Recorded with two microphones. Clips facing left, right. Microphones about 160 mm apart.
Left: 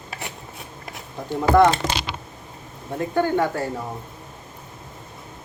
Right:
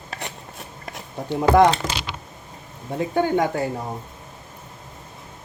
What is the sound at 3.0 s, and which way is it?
Speech, 15° right (ahead or behind).